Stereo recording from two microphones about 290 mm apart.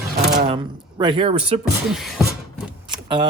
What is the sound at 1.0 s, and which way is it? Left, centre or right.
Speech, centre.